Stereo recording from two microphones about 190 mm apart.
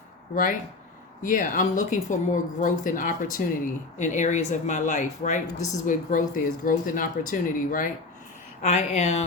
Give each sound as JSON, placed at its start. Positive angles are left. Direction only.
{"t": 1.2, "sound": "speech", "side_deg": 45}
{"t": 5.5, "sound": "a woman's voice", "side_deg": 15}
{"t": 5.8, "sound": "speech", "side_deg": 45}